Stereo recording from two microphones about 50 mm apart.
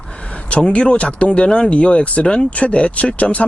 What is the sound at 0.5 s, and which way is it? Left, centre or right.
Speech, left.